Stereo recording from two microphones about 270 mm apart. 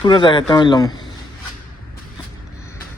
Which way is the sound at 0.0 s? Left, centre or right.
Centre.